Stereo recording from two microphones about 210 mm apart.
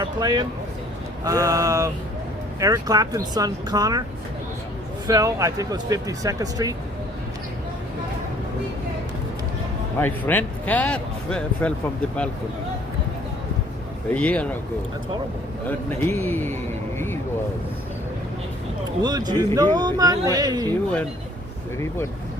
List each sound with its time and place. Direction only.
0.0 s speech: 20° right (ahead or behind)
5.0 s speech: 15° right (ahead or behind)
10.0 s speech: 10° left (ahead or behind)
14.1 s speech: 5° left (ahead or behind)
15.6 s speech: 10° left (ahead or behind)
19.0 s speech: 20° right (ahead or behind)